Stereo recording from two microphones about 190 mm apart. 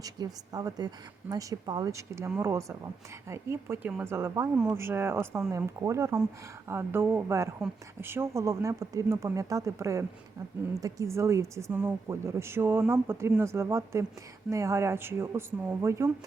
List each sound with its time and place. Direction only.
0.2 s speech: 20° right (ahead or behind)